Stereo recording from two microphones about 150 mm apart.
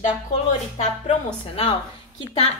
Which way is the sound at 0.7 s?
50° left (ahead or behind).